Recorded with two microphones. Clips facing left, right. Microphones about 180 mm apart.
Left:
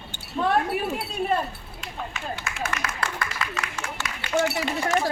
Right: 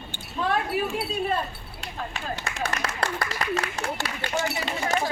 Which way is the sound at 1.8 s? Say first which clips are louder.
Right 1 dB; 35° right (ahead or behind).